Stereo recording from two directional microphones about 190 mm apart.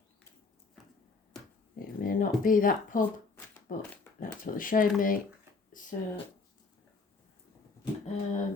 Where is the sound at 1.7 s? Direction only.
50° left (ahead or behind).